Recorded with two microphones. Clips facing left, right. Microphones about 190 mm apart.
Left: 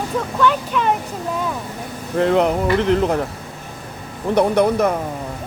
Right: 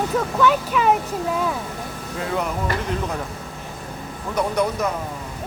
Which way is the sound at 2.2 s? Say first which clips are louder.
Left 9 dB; 70° left (ahead or behind).